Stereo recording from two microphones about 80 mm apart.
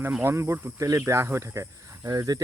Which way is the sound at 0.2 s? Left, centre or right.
Right.